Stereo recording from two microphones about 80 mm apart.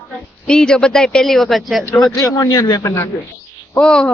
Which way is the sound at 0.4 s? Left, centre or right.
Centre.